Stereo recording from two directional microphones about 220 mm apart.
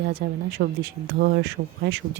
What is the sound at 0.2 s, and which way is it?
Speech, 45° right (ahead or behind).